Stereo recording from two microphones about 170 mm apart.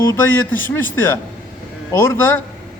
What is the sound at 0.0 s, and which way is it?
A man's voice, 15° left (ahead or behind).